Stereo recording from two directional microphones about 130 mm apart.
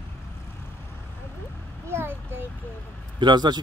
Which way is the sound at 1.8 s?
20° right (ahead or behind).